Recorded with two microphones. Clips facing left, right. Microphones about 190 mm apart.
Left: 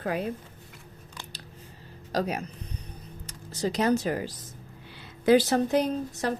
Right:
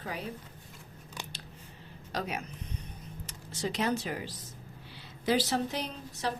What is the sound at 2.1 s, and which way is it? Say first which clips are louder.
Speech: left 7 dB; 40° left (ahead or behind).